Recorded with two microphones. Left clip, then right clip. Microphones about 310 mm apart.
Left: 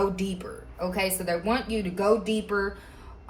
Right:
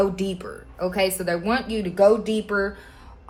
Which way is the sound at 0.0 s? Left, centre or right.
Right.